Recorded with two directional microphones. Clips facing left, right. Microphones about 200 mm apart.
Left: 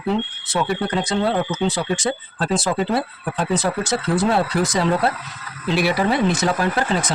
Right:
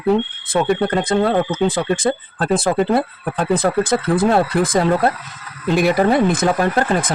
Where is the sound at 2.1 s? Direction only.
45° right (ahead or behind).